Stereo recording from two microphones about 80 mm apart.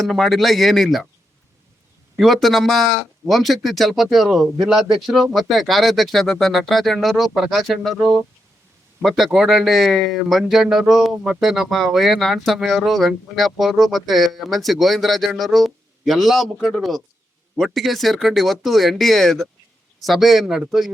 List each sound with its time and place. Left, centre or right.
0.0 s a man's voice: centre
2.1 s a man's voice: centre